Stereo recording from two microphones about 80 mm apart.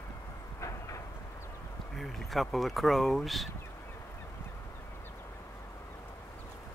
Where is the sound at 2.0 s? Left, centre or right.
Centre.